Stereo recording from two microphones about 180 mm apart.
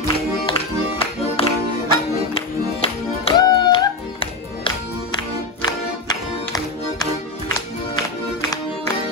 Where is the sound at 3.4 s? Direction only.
30° left (ahead or behind).